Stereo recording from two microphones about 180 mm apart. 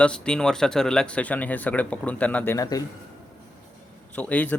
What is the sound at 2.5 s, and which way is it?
Speech, 20° left (ahead or behind).